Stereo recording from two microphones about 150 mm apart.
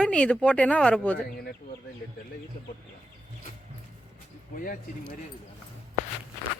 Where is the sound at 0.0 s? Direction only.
5° left (ahead or behind).